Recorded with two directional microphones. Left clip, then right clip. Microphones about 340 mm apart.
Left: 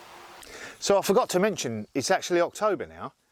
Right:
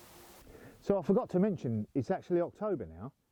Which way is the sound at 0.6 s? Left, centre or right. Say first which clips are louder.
Left 9 dB; centre.